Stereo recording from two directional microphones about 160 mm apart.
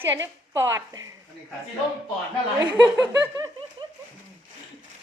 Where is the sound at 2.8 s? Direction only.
15° right (ahead or behind).